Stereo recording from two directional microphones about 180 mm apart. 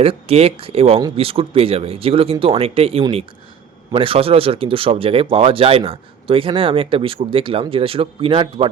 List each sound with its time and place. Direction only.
0.0 s speech: 35° right (ahead or behind)